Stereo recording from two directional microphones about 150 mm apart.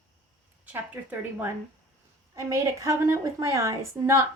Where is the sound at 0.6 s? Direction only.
10° right (ahead or behind).